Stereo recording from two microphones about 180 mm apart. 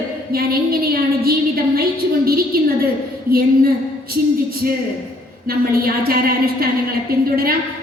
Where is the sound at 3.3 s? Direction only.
60° right (ahead or behind).